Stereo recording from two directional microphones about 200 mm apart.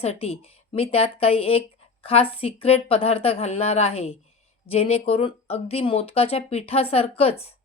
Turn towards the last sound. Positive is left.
turn(degrees=30)  # may be behind; listen again after turning